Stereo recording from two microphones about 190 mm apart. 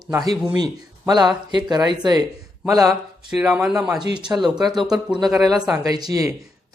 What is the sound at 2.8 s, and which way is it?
Speech, 5° right (ahead or behind).